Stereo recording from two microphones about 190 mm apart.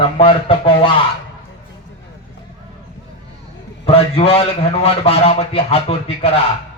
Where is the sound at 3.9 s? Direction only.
30° left (ahead or behind).